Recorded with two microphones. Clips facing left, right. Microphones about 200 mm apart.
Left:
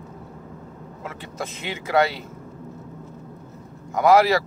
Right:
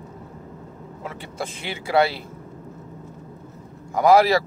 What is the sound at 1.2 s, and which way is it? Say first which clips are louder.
Speech: even; 30° right (ahead or behind).